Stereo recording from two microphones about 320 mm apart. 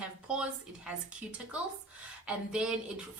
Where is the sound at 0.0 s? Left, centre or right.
Centre.